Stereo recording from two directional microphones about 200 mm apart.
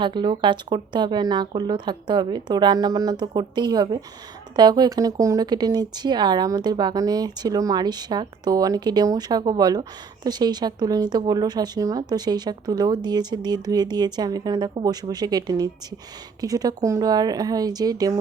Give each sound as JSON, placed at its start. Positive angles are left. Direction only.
{"t": 0.0, "sound": "speech", "side_deg": -25}